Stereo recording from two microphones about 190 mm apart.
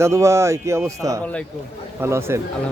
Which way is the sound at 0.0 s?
15° right (ahead or behind).